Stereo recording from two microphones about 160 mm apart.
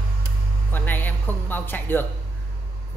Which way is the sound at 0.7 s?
10° left (ahead or behind).